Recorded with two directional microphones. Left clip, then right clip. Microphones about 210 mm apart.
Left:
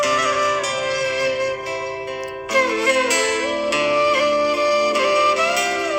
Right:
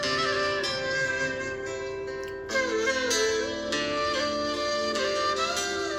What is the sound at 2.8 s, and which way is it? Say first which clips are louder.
Music: left 8 dB; 40° left (ahead or behind).